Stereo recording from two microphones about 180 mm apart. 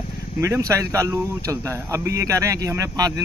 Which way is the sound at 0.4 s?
20° right (ahead or behind).